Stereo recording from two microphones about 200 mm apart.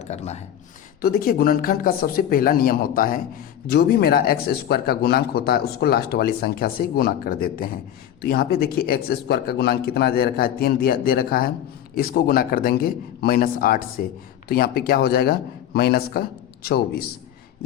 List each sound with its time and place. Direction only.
0.0 s speech: 35° left (ahead or behind)
1.0 s speech: 45° left (ahead or behind)